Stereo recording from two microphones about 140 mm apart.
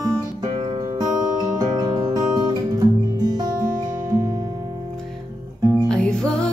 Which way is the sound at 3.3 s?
25° right (ahead or behind).